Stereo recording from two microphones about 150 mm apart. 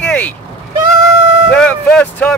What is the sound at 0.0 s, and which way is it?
Vehicle, 10° left (ahead or behind).